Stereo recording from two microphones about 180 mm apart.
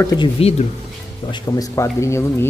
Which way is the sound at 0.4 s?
35° left (ahead or behind).